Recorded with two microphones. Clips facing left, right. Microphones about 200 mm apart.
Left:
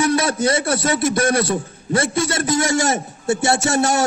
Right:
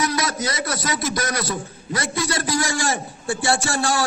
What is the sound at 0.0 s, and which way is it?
A man's voice, 30° left (ahead or behind).